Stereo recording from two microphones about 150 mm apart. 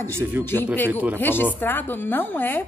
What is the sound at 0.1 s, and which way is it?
Speech, 15° right (ahead or behind).